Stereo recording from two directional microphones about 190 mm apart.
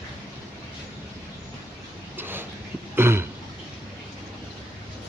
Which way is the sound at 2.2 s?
10° right (ahead or behind).